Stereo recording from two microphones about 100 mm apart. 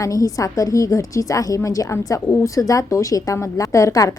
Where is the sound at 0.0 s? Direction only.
35° left (ahead or behind).